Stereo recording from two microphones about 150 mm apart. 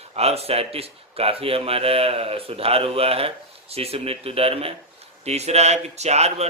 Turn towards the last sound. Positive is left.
turn(degrees=-45)  # may be behind; listen again after turning